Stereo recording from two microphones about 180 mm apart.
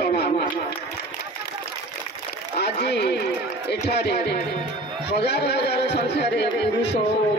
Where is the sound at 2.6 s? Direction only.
70° left (ahead or behind).